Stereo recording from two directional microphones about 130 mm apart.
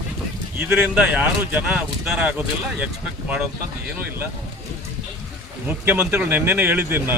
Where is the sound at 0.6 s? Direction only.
10° right (ahead or behind).